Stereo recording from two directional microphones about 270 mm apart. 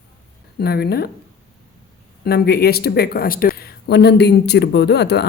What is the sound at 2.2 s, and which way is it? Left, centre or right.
Speech, left.